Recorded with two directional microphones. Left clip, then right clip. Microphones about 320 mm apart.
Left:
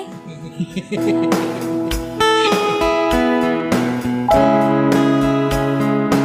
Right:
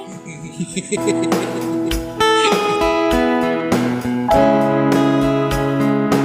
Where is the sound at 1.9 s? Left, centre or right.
Centre.